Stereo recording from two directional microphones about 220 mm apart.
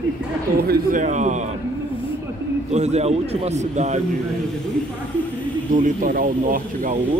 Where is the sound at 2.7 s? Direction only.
30° right (ahead or behind).